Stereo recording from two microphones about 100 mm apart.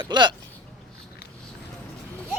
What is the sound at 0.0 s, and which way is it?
Speech, 50° right (ahead or behind).